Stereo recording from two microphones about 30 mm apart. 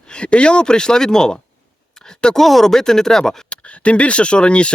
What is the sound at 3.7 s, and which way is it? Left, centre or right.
Speech, left.